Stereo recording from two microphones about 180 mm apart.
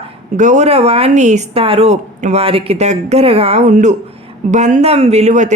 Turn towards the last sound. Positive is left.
turn(degrees=-40)  # may be behind; listen again after turning